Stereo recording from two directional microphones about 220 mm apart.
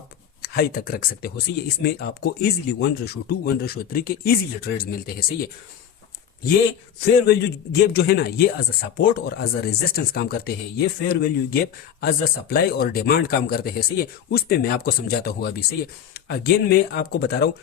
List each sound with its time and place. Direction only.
0.4 s speech: 45° left (ahead or behind)
7.3 s speech: 45° left (ahead or behind)